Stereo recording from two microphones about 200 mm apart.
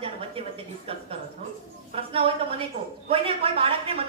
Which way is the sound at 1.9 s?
30° right (ahead or behind).